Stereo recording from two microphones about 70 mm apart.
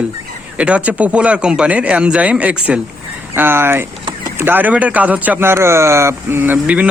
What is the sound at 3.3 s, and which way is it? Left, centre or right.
A man's voice, right.